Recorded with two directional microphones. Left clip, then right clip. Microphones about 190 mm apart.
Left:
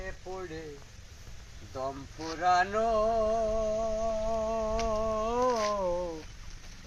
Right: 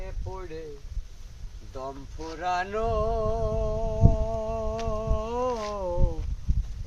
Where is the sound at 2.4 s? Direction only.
20° right (ahead or behind).